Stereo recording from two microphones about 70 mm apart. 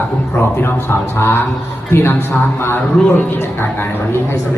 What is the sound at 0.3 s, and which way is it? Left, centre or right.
A woman's voice, left.